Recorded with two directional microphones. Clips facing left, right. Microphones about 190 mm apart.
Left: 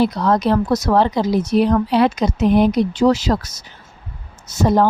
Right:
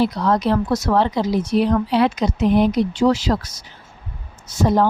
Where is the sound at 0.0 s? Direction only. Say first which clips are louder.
Left 2 dB; 45° left (ahead or behind).